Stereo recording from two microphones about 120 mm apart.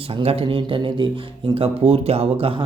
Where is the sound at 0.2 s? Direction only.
55° right (ahead or behind).